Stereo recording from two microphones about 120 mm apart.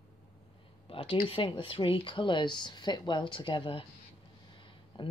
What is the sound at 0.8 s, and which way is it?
Speech, 50° left (ahead or behind).